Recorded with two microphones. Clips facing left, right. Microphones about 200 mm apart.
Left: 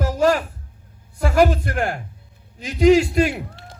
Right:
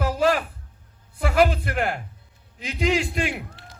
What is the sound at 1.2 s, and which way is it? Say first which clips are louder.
A man's voice: left 3 dB; 45° left (ahead or behind).